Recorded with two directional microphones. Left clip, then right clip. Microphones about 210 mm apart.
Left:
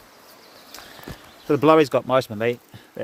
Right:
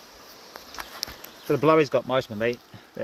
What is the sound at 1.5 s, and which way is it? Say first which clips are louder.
Speech: left 4 dB; 25° left (ahead or behind).